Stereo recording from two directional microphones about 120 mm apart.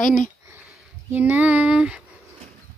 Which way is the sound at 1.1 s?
15° right (ahead or behind).